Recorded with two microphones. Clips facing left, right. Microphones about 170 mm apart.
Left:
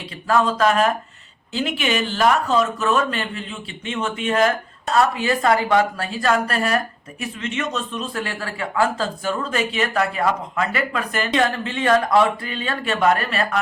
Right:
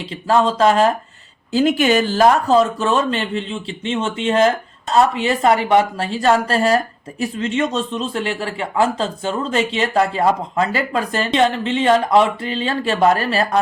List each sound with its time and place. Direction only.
0.1 s a woman's voice: 30° right (ahead or behind)
1.5 s a woman's voice: 40° right (ahead or behind)